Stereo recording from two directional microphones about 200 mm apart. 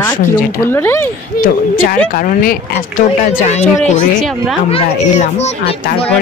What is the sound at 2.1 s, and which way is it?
Speech, 45° left (ahead or behind).